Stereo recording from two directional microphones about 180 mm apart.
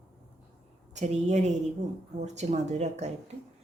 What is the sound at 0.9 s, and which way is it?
A woman's voice, 40° right (ahead or behind).